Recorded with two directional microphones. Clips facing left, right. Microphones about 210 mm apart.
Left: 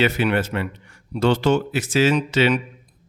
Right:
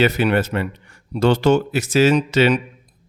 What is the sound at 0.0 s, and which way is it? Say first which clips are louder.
A man's voice: right 3 dB; 40° right (ahead or behind).